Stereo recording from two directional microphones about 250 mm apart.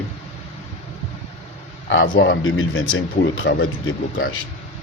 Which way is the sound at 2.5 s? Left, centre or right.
Left.